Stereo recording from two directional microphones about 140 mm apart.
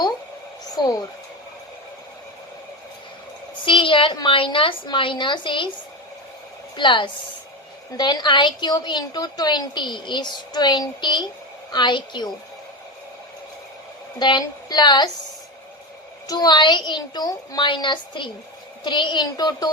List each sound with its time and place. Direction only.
3.6 s a woman's voice: 35° left (ahead or behind)
6.7 s a woman's voice: 35° left (ahead or behind)
14.2 s a woman's voice: 30° left (ahead or behind)
16.2 s a woman's voice: 25° left (ahead or behind)